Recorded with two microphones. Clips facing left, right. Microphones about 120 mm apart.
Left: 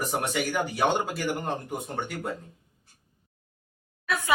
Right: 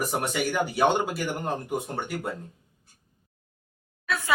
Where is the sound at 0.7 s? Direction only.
5° right (ahead or behind).